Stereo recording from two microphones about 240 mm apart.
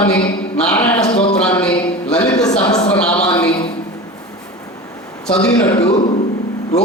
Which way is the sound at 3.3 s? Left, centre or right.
Centre.